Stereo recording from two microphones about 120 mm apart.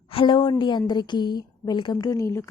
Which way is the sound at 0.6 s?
35° left (ahead or behind).